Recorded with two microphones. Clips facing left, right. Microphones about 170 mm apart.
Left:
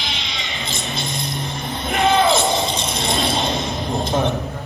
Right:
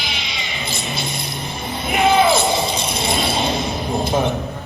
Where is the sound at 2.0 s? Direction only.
20° left (ahead or behind).